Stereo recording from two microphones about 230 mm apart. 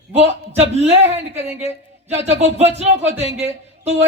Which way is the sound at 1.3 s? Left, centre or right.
Centre.